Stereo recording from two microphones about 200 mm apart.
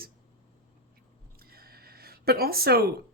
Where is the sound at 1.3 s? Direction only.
50° right (ahead or behind).